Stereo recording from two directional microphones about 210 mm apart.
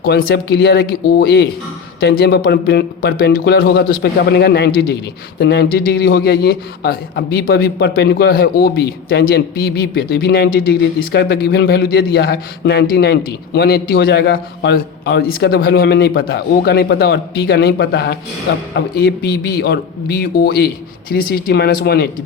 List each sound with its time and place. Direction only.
0.0 s a man's voice: 45° left (ahead or behind)